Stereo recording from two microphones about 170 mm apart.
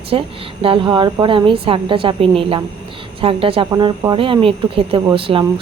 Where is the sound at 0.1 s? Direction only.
35° right (ahead or behind).